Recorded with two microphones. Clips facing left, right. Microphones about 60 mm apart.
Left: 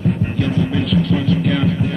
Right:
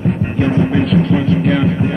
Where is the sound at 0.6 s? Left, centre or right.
Right.